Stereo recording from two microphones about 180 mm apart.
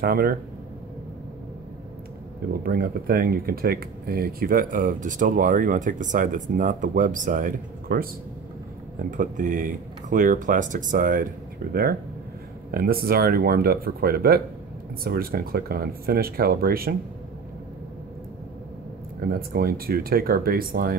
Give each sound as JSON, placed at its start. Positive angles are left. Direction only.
{"t": 0.0, "sound": "speech", "side_deg": -55}
{"t": 2.6, "sound": "speech", "side_deg": -55}
{"t": 9.1, "sound": "speech", "side_deg": -45}
{"t": 19.3, "sound": "speech", "side_deg": -55}